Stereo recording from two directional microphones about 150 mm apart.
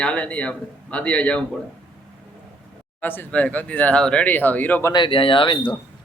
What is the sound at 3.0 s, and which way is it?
Speech, 10° left (ahead or behind).